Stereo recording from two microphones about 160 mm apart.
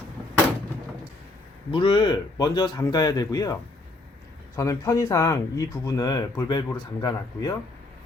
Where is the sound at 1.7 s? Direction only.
30° left (ahead or behind).